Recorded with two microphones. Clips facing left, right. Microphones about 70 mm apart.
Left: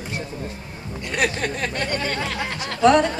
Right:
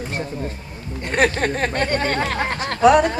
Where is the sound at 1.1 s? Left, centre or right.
Right.